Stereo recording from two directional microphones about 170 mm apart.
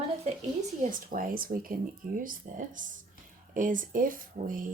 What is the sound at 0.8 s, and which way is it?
Speech, 55° right (ahead or behind).